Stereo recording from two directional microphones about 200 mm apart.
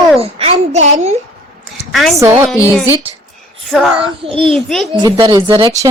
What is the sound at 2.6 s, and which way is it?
Speech, 15° left (ahead or behind).